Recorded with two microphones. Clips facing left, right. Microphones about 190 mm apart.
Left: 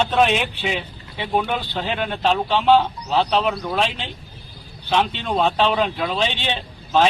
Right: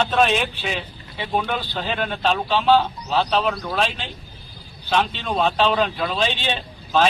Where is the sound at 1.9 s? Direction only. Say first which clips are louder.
Left 1 dB; 15° left (ahead or behind).